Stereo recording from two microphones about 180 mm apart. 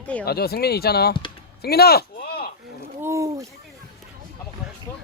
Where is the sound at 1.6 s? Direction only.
60° left (ahead or behind).